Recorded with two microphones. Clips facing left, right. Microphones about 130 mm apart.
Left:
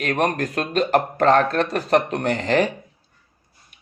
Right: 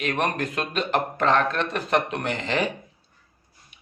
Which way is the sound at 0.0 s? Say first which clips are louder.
Left 4 dB; 40° left (ahead or behind).